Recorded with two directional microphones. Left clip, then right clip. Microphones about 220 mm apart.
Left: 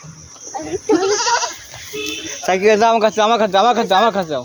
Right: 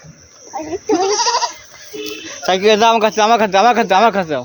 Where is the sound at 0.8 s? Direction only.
30° right (ahead or behind).